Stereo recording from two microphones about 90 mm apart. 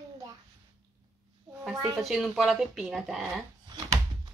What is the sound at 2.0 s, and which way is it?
Speech, centre (ahead or behind).